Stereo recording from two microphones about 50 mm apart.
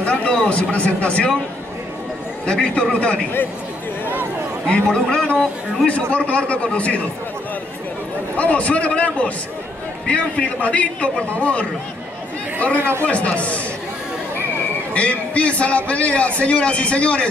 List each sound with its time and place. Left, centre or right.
0.0 s speech: left
2.4 s a man's voice: left
4.6 s a man's voice: left
8.4 s a man's voice: left
12.5 s a man's voice: left
15.0 s a man's voice: left